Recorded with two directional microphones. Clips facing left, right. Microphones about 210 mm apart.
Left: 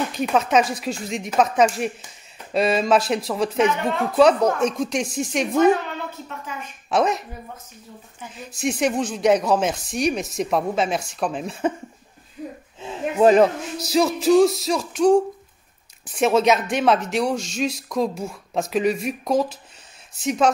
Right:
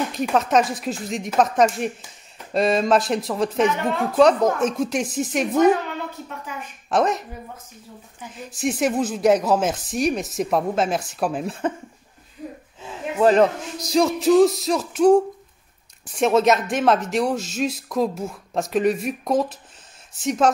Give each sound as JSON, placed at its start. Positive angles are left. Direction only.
{"t": 0.1, "sound": "speech", "side_deg": 0}
{"t": 8.5, "sound": "speech", "side_deg": 0}
{"t": 12.8, "sound": "speech", "side_deg": 15}